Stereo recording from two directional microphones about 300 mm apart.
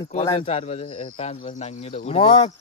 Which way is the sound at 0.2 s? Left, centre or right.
Centre.